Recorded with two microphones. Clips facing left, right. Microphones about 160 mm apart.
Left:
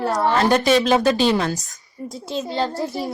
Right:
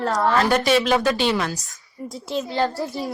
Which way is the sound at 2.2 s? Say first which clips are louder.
Right 1 dB; 20° left (ahead or behind).